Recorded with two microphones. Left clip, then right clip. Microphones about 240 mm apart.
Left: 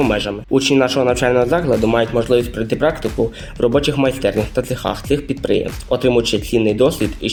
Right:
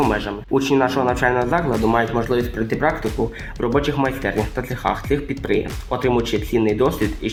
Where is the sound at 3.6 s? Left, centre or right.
Left.